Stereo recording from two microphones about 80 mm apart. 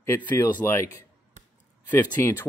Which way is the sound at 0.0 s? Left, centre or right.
Left.